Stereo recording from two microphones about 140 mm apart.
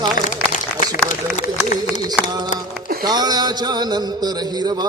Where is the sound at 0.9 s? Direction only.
65° left (ahead or behind).